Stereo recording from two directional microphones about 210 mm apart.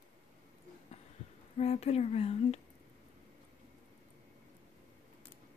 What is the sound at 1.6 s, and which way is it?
Speech, 30° left (ahead or behind).